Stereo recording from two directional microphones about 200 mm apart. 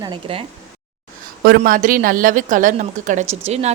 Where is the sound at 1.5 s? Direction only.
45° right (ahead or behind).